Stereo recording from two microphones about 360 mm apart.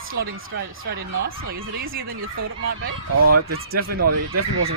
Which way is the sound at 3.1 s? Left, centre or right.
Right.